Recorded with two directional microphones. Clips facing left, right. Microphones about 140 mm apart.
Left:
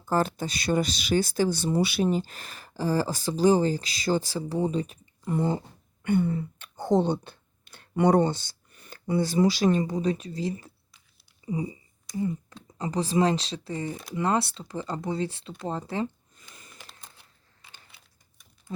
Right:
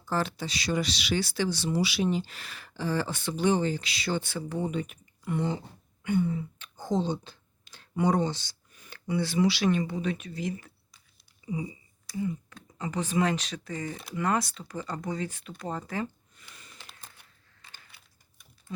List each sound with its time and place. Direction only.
0.1 s speech: 45° left (ahead or behind); by 15.8 s 25° left (ahead or behind)